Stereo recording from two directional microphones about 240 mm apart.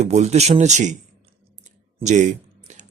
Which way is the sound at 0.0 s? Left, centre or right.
Right.